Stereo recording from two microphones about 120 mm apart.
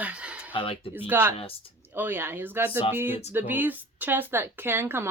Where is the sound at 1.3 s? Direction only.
50° left (ahead or behind).